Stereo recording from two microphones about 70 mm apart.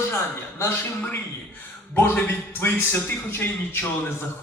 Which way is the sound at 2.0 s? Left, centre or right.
Left.